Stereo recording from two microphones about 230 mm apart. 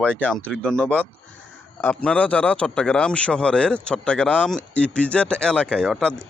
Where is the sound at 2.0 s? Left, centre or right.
Centre.